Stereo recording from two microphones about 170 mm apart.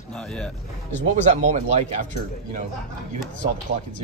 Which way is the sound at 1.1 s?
45° right (ahead or behind).